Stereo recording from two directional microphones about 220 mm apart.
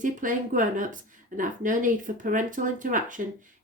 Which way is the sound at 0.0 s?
35° right (ahead or behind).